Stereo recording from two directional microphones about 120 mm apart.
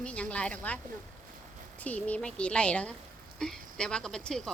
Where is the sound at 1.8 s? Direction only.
10° left (ahead or behind).